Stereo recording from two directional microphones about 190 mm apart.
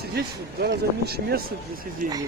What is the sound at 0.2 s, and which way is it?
Speech, 55° right (ahead or behind).